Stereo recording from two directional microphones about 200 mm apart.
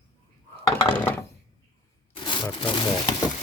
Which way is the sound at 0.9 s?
10° left (ahead or behind).